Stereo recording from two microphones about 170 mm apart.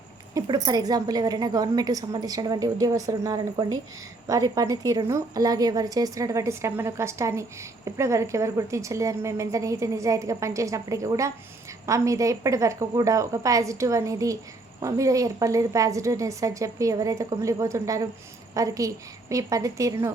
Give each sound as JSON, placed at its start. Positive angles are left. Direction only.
{"t": 0.3, "sound": "a woman's voice", "side_deg": -20}